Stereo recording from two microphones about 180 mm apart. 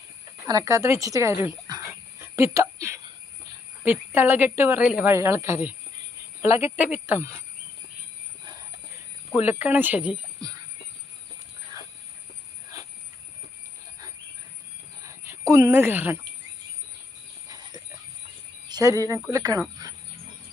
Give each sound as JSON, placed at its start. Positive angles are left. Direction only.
{"t": 0.5, "sound": "a woman's voice", "side_deg": -20}
{"t": 1.9, "sound": "a sound", "side_deg": -15}
{"t": 3.8, "sound": "a woman's voice", "side_deg": -10}
{"t": 9.4, "sound": "a woman's voice", "side_deg": -10}
{"t": 15.0, "sound": "speech", "side_deg": -15}
{"t": 18.7, "sound": "speech", "side_deg": -20}
{"t": 19.8, "sound": "a sound", "side_deg": -20}